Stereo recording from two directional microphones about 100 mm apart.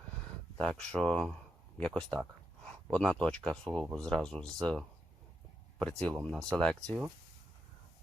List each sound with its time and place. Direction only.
0.5 s speech: 10° left (ahead or behind)